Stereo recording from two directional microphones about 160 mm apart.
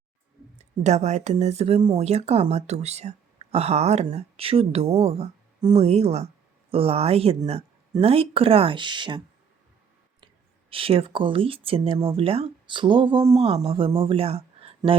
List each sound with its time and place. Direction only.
0.6 s speech: 45° right (ahead or behind); by 9.2 s 30° right (ahead or behind)
10.7 s speech: 35° right (ahead or behind)